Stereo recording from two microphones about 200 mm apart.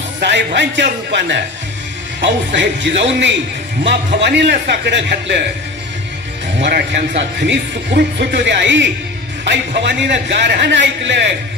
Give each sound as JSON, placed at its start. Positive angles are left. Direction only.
{"t": 0.2, "sound": "a man's voice", "side_deg": -60}
{"t": 6.6, "sound": "a man's voice", "side_deg": -60}